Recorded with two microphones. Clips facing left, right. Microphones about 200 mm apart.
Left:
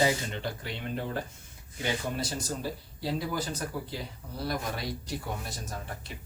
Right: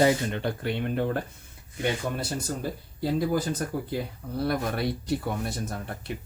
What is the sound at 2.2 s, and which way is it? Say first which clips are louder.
Speech: right 3 dB; 55° right (ahead or behind).